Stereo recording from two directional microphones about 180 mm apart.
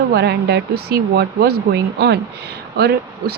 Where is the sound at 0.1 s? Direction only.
65° right (ahead or behind).